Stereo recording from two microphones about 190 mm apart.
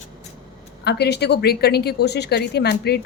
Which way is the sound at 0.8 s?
60° left (ahead or behind).